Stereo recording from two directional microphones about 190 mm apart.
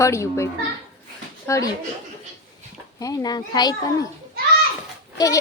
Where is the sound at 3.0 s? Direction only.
20° left (ahead or behind).